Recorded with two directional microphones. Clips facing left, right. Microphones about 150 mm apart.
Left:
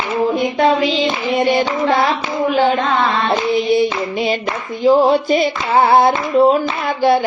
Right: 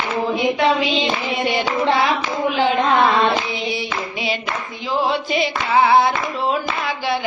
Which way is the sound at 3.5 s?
50° left (ahead or behind).